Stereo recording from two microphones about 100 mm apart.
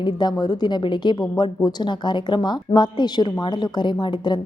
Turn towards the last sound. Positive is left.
turn(degrees=50)  # may be behind; listen again after turning